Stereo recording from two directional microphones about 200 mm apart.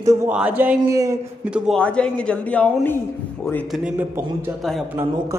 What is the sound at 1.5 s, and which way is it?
Speech, 5° left (ahead or behind).